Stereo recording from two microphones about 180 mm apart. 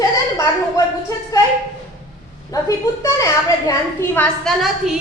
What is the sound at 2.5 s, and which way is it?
A woman's voice, 20° left (ahead or behind).